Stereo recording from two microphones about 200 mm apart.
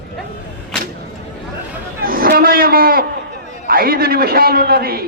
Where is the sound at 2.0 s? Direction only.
45° right (ahead or behind).